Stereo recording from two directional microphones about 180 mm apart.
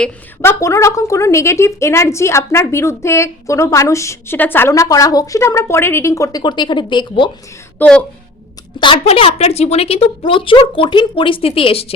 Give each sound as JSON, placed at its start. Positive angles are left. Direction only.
{"t": 0.0, "sound": "a woman's voice", "side_deg": 15}
{"t": 7.8, "sound": "a woman's voice", "side_deg": 5}
{"t": 8.8, "sound": "a woman's voice", "side_deg": 30}